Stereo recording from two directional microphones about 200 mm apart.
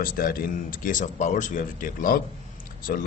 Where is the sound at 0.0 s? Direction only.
45° left (ahead or behind).